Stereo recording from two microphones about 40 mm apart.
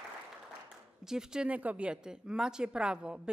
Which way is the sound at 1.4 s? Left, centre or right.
Right.